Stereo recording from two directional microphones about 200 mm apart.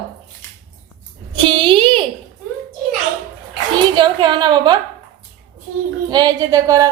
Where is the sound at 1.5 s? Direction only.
25° right (ahead or behind).